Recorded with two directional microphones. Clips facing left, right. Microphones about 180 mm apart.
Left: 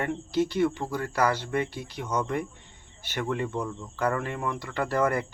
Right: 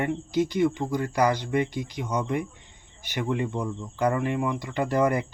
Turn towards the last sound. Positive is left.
turn(degrees=-15)  # may be behind; listen again after turning